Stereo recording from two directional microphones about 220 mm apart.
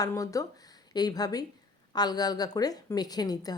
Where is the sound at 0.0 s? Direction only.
15° left (ahead or behind).